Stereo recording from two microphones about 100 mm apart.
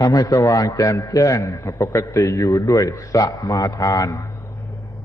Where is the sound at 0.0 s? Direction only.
35° left (ahead or behind).